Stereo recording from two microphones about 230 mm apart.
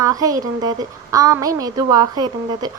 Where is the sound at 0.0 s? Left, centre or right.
Centre.